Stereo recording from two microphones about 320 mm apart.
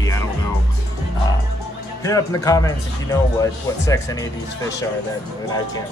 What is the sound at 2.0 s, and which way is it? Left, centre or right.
A man's voice, centre.